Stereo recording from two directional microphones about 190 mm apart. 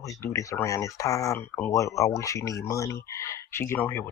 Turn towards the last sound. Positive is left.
turn(degrees=10)  # may be behind; listen again after turning